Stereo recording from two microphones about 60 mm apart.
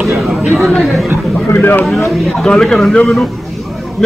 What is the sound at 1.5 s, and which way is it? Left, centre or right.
Speech, left.